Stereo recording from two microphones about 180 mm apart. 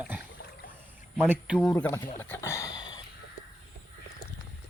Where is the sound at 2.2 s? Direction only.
15° left (ahead or behind).